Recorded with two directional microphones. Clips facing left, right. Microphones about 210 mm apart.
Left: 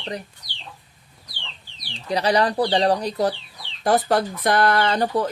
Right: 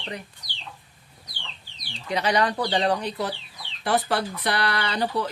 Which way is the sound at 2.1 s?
35° left (ahead or behind).